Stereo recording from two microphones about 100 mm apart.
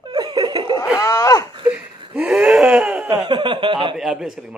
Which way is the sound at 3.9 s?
5° right (ahead or behind).